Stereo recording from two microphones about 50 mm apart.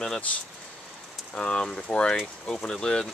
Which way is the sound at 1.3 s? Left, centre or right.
Centre.